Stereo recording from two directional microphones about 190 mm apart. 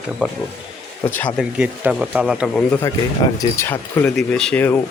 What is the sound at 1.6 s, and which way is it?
Speech, 5° right (ahead or behind).